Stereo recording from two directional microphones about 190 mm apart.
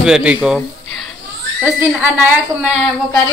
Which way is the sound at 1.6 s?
5° right (ahead or behind).